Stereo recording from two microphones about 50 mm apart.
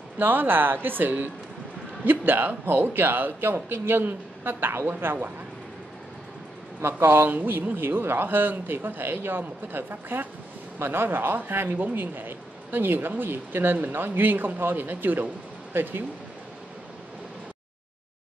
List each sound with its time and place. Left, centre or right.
0.2 s speech: right
6.8 s speech: right
15.7 s speech: right